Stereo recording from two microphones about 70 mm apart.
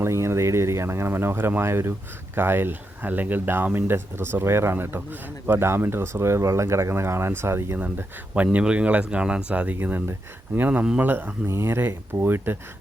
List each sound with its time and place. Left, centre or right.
0.0 s speech: right
7.8 s speech: right
9.7 s speech: right